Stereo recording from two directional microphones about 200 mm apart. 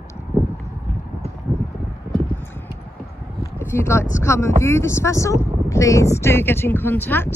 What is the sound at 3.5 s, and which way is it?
Speech, 15° left (ahead or behind).